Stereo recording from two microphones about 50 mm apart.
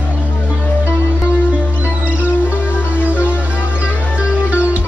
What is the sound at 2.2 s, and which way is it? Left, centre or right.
Music, right.